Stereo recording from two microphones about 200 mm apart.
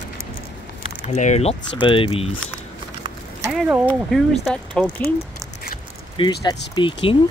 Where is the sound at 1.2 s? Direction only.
35° left (ahead or behind).